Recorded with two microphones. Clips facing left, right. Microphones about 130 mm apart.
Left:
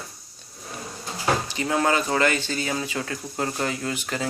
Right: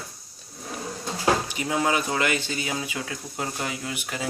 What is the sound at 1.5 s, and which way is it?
Speech, 10° right (ahead or behind).